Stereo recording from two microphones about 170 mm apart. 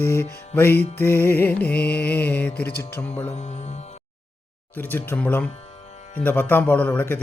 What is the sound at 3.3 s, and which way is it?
Mantra, 40° left (ahead or behind).